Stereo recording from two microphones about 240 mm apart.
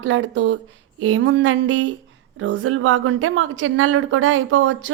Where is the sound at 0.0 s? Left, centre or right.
Right.